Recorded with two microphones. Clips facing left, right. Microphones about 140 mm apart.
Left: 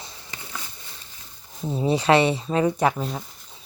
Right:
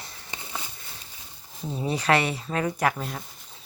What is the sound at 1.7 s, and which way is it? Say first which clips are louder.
Speech: left 5 dB; 30° left (ahead or behind).